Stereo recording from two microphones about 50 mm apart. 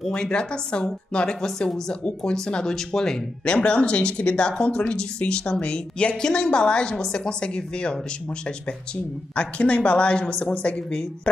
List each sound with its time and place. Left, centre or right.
0.1 s a woman's voice: centre